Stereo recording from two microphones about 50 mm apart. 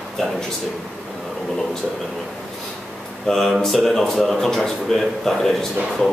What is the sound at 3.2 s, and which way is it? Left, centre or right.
A man's voice, centre.